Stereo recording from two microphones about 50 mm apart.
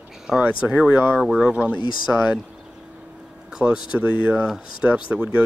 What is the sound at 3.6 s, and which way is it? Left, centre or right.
Speech, right.